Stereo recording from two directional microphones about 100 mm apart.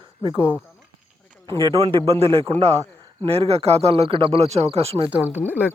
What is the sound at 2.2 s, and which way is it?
Speech, 70° right (ahead or behind).